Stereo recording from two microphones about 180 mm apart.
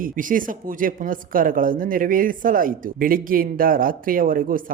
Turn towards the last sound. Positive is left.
turn(degrees=-50)  # may be behind; listen again after turning